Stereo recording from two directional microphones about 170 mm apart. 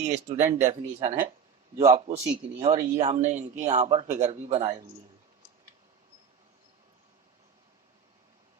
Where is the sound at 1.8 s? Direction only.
40° right (ahead or behind).